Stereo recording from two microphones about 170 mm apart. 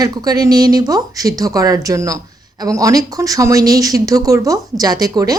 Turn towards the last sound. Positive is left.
turn(degrees=-20)  # may be behind; listen again after turning